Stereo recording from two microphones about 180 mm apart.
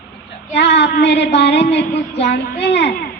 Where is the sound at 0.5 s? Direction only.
70° left (ahead or behind).